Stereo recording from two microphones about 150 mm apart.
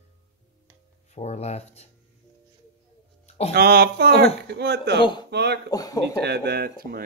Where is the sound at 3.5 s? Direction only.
90° right.